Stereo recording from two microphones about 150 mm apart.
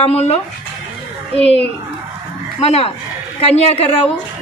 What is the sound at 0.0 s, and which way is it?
Speech, 45° left (ahead or behind).